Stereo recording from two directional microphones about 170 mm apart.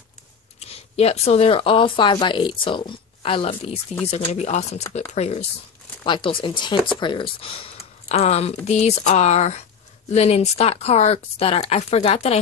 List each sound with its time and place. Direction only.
0.6 s speech: 35° left (ahead or behind)
6.0 s speech: 30° left (ahead or behind)